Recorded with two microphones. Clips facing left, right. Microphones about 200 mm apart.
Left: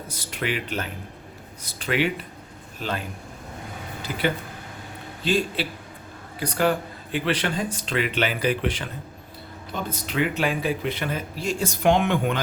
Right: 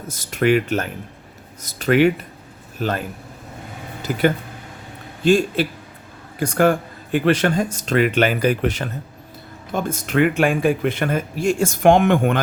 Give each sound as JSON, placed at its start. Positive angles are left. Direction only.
{"t": 0.2, "sound": "speech", "side_deg": -45}
{"t": 4.1, "sound": "speech", "side_deg": -50}